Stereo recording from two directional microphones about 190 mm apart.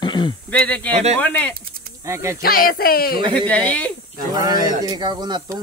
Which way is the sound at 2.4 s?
50° left (ahead or behind).